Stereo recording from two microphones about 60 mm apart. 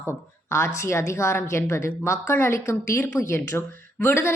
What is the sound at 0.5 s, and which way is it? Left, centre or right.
A woman's voice, left.